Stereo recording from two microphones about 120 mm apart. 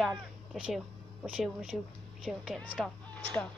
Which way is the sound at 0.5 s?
10° right (ahead or behind).